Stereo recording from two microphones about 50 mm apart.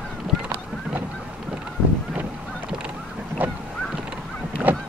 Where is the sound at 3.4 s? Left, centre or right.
Right.